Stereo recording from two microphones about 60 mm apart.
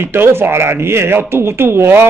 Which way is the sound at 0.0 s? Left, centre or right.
Right.